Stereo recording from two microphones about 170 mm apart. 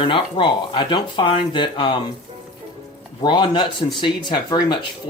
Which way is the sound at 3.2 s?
25° left (ahead or behind).